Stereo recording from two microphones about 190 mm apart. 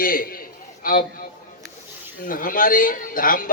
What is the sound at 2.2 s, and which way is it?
A man's voice, 45° left (ahead or behind).